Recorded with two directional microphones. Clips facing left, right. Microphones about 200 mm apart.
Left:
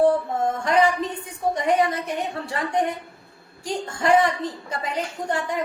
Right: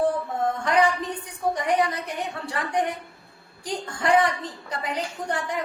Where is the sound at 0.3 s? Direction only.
25° left (ahead or behind).